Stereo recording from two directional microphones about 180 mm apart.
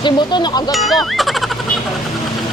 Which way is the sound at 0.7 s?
Centre (ahead or behind).